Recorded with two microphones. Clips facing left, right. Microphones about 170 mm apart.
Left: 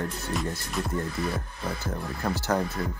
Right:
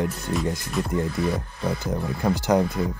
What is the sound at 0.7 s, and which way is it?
Speech, centre (ahead or behind).